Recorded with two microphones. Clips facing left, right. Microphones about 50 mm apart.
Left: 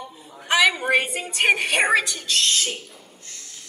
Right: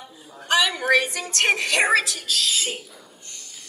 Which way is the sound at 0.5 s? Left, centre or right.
Centre.